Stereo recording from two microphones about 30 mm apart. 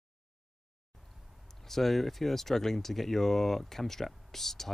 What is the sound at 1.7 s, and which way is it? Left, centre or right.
Speech, centre.